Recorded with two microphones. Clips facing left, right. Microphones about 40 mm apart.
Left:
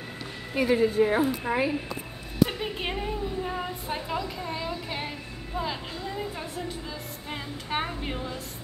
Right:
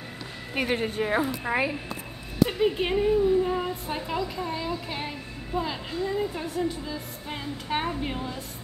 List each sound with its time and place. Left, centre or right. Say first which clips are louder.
0.6 s a woman's voice: left 5 dB; right
1.5 s speech: right 1 dB; right
2.4 s a woman's voice: right 3 dB; centre